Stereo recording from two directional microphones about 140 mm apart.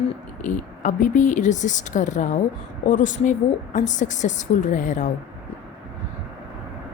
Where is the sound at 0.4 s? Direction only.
65° left (ahead or behind).